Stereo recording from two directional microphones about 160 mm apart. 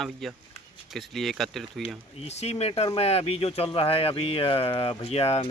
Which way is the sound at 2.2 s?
40° left (ahead or behind).